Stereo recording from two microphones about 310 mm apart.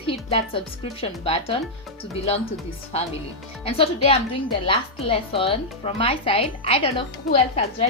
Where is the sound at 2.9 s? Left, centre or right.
Centre.